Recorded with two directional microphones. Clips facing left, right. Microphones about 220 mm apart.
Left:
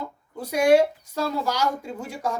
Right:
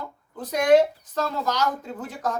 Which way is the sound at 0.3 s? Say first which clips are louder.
Even; 10° left (ahead or behind).